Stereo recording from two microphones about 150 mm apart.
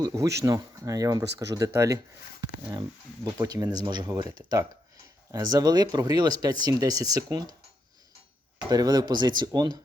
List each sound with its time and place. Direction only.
0.0 s speech: 20° right (ahead or behind)
8.7 s speech: 25° right (ahead or behind)